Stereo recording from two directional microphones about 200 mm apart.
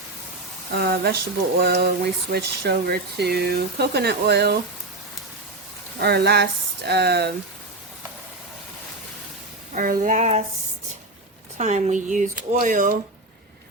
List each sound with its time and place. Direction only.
0.7 s speech: 50° right (ahead or behind)
6.0 s speech: 55° right (ahead or behind)
9.7 s speech: 40° right (ahead or behind)
11.5 s speech: 35° right (ahead or behind)